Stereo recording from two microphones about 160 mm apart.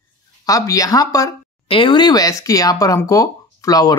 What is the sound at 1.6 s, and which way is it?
Speech, 35° left (ahead or behind).